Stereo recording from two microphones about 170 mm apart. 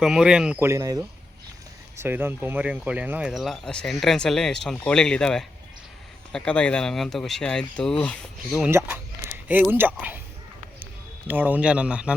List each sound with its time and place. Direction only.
0.0 s speech: 5° right (ahead or behind)
0.6 s speech: 20° right (ahead or behind); by 8.7 s centre (ahead or behind)
9.5 s speech: 10° right (ahead or behind)
11.3 s speech: 10° right (ahead or behind)